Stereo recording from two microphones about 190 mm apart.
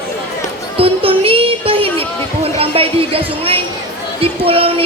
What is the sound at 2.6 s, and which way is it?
Speech, 30° right (ahead or behind).